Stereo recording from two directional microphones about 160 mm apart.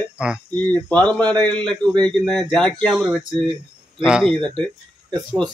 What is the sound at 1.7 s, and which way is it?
Speech, 5° left (ahead or behind).